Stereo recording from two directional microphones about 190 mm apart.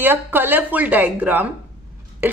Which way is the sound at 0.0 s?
10° right (ahead or behind).